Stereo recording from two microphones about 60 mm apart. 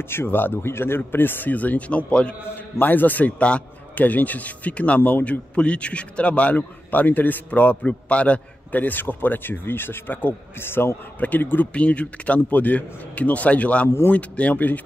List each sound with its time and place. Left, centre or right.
0.1 s speech: left; by 2.3 s centre
2.4 s a man's voice: left
11.1 s a man's voice: left
13.8 s speech: left
14.1 s a man's voice: left